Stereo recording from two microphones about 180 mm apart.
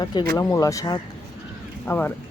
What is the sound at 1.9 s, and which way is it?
Speech, 10° left (ahead or behind).